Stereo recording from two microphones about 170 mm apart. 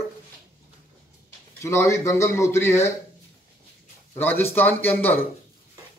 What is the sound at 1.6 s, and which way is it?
A man's voice, 15° left (ahead or behind).